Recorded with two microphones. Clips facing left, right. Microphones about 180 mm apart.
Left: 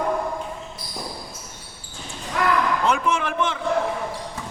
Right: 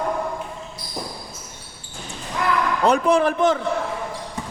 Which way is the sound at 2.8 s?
35° right (ahead or behind).